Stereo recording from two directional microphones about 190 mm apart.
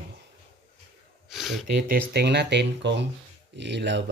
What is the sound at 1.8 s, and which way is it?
Speech, 55° right (ahead or behind).